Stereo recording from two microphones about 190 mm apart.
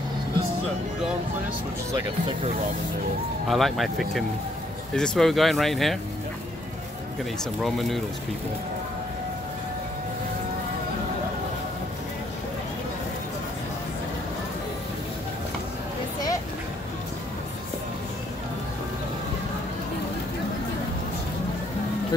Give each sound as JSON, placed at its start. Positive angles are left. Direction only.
{"t": 2.0, "sound": "speech", "side_deg": -25}
{"t": 3.4, "sound": "speech", "side_deg": 0}
{"t": 7.6, "sound": "speech", "side_deg": 0}